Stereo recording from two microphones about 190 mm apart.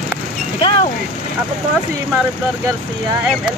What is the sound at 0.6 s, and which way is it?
Vehicle, 30° left (ahead or behind).